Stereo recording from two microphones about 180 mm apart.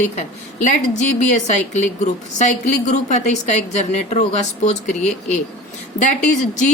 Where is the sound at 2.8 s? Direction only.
40° left (ahead or behind).